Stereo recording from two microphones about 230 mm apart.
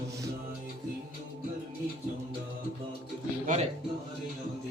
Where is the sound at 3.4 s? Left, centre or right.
Right.